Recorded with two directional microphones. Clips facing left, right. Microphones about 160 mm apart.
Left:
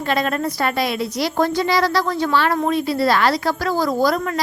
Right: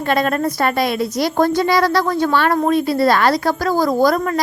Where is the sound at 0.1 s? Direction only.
50° right (ahead or behind).